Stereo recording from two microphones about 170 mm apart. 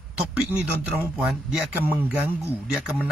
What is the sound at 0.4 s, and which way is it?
Speech, 5° right (ahead or behind).